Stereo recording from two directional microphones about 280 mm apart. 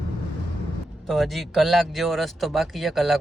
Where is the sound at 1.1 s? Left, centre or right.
Centre.